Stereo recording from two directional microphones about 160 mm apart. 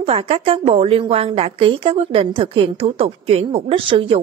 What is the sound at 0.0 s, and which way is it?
A woman's voice, 35° right (ahead or behind).